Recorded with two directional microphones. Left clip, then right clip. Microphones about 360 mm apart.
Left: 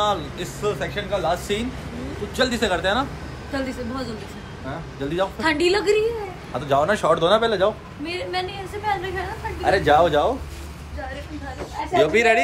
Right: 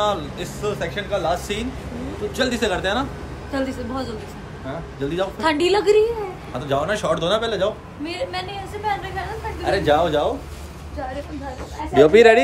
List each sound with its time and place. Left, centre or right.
0.0 s a man's voice: centre
5.1 s a woman's voice: centre
6.7 s a man's voice: centre
8.0 s a man's voice: centre
9.7 s a man's voice: centre
11.9 s speech: right